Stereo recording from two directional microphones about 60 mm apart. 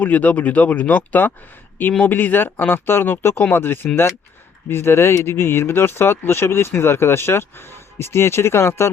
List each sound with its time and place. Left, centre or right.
0.0 s speech: left